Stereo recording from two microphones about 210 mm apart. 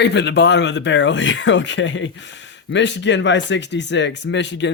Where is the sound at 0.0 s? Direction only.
55° left (ahead or behind).